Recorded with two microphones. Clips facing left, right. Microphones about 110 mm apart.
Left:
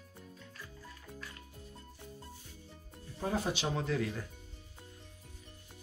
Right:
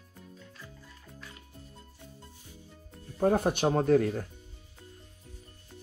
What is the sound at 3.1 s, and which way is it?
Speech, 55° right (ahead or behind).